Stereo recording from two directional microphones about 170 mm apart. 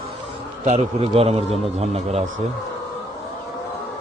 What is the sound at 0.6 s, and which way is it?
Speech, 40° right (ahead or behind).